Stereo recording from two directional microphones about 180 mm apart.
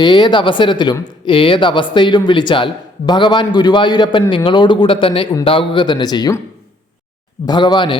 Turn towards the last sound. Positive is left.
turn(degrees=25)  # may be behind; listen again after turning